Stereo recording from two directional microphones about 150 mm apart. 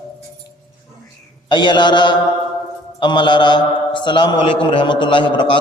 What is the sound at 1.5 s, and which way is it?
A man's voice, 30° left (ahead or behind).